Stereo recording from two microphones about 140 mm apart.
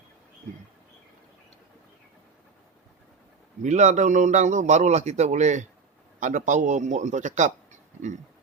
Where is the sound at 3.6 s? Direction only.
55° right (ahead or behind).